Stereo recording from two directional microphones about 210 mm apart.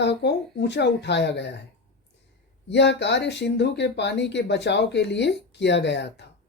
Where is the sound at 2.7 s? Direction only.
55° left (ahead or behind).